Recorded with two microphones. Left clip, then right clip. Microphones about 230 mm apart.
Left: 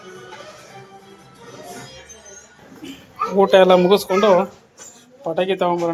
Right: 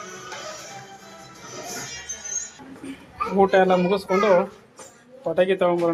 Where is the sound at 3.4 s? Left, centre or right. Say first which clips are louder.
Left 6 dB; centre.